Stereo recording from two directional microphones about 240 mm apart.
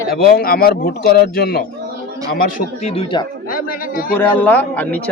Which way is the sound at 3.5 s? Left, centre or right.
Left.